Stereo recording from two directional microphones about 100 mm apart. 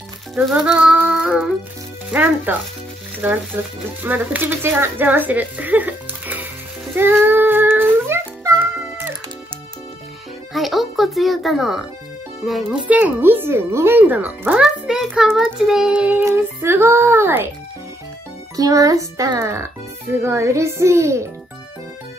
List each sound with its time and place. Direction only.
0.4 s music: 10° right (ahead or behind)
2.0 s child singing: 15° right (ahead or behind)
3.2 s a child's voice: 20° right (ahead or behind)
7.0 s music: 20° right (ahead or behind)
10.5 s music: centre (ahead or behind)
12.8 s a child's voice: 15° right (ahead or behind)
14.6 s music: 5° right (ahead or behind)
15.5 s child singing: 5° right (ahead or behind)
16.3 s a child's voice: 25° right (ahead or behind)
18.6 s a child's voice: 35° right (ahead or behind)